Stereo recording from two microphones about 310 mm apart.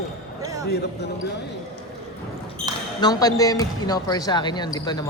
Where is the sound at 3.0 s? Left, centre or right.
Centre.